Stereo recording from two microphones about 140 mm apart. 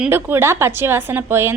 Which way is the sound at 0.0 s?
15° right (ahead or behind).